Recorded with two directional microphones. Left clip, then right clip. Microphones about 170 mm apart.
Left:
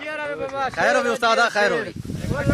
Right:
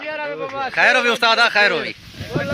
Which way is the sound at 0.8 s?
10° right (ahead or behind).